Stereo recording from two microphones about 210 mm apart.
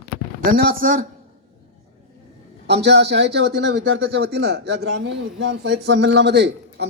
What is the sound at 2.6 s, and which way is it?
Speech, 55° right (ahead or behind).